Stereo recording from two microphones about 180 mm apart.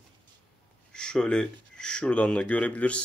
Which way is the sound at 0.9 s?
5° left (ahead or behind).